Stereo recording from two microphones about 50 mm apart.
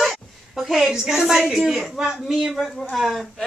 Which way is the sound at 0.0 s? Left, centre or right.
Centre.